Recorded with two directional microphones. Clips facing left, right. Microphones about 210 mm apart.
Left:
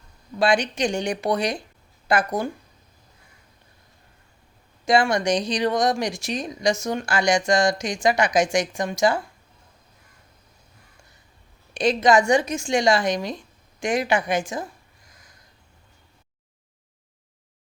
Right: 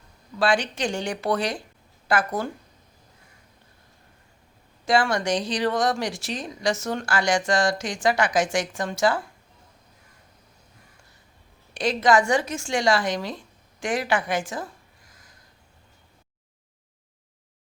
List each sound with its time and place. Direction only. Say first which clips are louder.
0.3 s speech: left 2 dB; 15° left (ahead or behind)
4.9 s speech: left 2 dB; 15° left (ahead or behind)
11.7 s speech: left 2 dB; 20° left (ahead or behind)